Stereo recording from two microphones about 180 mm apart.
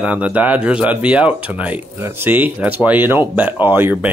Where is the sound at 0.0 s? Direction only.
5° right (ahead or behind).